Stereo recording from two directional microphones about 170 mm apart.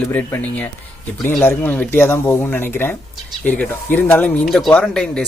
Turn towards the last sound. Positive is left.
turn(degrees=5)  # may be behind; listen again after turning